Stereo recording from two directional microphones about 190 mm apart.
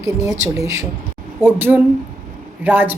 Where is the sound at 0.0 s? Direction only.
15° right (ahead or behind).